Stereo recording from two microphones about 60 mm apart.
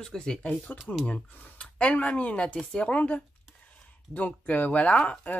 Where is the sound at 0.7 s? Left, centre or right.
Left.